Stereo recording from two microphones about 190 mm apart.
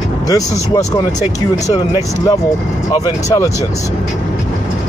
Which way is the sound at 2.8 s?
20° left (ahead or behind).